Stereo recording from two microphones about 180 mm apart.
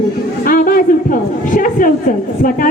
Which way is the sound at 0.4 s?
50° left (ahead or behind).